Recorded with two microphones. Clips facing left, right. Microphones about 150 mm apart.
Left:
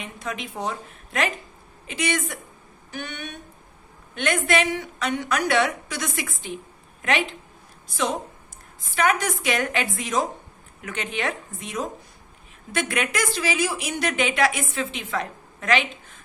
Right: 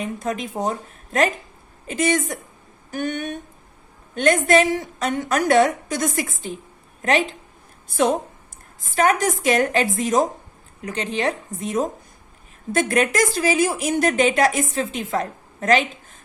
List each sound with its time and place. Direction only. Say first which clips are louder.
0.0 s a woman's voice: right 7 dB; 45° right (ahead or behind)
7.9 s a woman's voice: right 7 dB; 50° right (ahead or behind)